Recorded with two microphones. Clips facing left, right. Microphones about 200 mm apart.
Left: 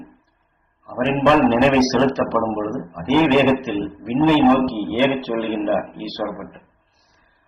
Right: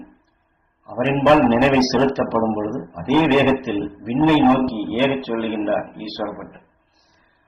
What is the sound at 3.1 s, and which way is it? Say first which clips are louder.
A man's voice: even; 15° right (ahead or behind).